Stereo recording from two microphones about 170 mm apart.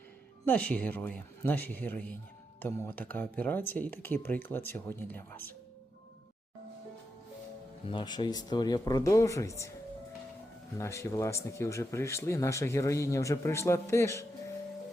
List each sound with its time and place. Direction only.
0.4 s speech: 10° left (ahead or behind)
7.9 s speech: 25° left (ahead or behind)
10.8 s speech: 15° left (ahead or behind)